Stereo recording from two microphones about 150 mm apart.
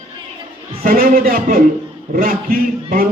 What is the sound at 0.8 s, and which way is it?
Speech, 70° right (ahead or behind).